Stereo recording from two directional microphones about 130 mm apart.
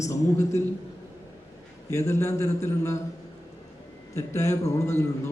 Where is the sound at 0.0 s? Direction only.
25° left (ahead or behind).